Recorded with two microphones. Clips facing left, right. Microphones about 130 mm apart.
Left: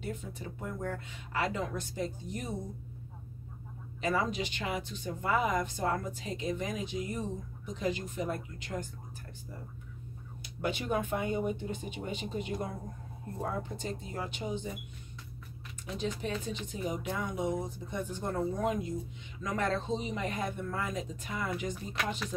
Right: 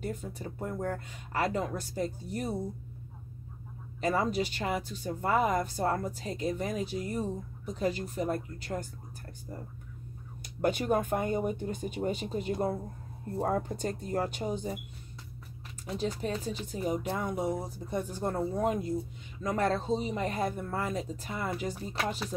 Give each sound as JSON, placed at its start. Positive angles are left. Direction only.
{"t": 0.0, "sound": "speech", "side_deg": -45}
{"t": 4.0, "sound": "speech", "side_deg": -40}
{"t": 13.4, "sound": "speech", "side_deg": -45}
{"t": 15.8, "sound": "speech", "side_deg": -40}